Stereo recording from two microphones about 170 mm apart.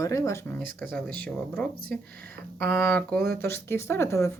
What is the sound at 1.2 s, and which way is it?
Speech, 5° left (ahead or behind).